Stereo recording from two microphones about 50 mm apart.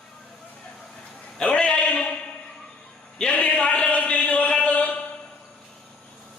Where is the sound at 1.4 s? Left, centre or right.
Left.